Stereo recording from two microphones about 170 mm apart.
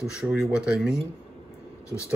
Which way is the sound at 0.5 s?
5° right (ahead or behind).